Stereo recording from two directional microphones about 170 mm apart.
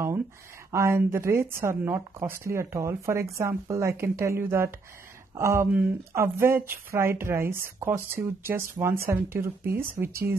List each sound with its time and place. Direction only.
0.7 s speech: 15° right (ahead or behind)